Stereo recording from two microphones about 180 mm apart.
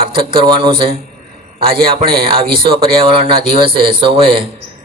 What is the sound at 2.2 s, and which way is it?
A man's voice, 30° right (ahead or behind).